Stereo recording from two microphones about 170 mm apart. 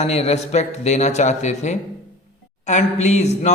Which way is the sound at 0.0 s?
40° left (ahead or behind).